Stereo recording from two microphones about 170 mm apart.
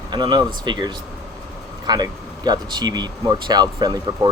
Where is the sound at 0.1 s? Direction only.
25° right (ahead or behind).